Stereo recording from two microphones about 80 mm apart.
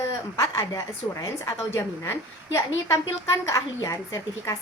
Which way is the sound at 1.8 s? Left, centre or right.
Left.